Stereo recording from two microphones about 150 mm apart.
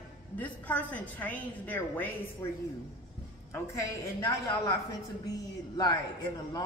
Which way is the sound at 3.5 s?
20° left (ahead or behind).